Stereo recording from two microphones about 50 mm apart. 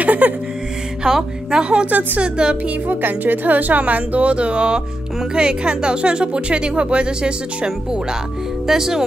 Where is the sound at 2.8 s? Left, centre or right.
Right.